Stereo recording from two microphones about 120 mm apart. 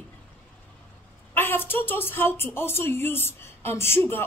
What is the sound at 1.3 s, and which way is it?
A woman's voice, 20° left (ahead or behind).